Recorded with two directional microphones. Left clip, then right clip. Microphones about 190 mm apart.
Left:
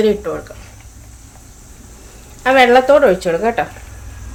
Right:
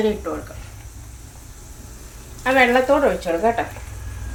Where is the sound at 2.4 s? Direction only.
65° left (ahead or behind).